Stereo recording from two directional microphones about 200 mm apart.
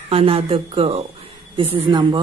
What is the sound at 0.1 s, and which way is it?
A woman's voice, 30° right (ahead or behind).